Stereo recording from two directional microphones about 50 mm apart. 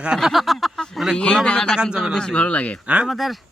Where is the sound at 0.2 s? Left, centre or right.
Centre.